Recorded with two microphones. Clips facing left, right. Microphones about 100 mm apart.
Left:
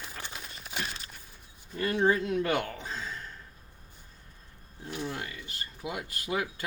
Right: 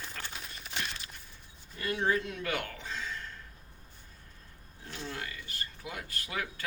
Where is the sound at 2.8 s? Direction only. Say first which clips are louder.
Left 1 dB; 35° left (ahead or behind).